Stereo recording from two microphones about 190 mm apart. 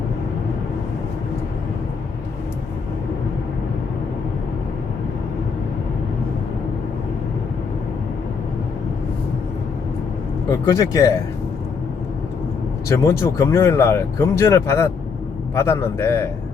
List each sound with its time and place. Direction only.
10.7 s speech: 15° left (ahead or behind)
12.9 s speech: 15° left (ahead or behind)